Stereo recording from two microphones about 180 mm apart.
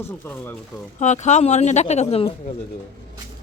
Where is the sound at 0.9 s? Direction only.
40° left (ahead or behind).